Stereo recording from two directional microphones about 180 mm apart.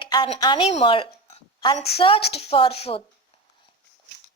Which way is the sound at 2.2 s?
65° left (ahead or behind).